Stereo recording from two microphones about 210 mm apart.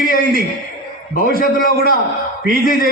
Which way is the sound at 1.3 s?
45° left (ahead or behind).